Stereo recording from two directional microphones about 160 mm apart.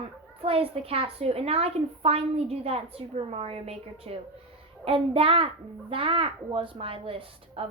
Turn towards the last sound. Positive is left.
turn(degrees=-35)  # may be behind; listen again after turning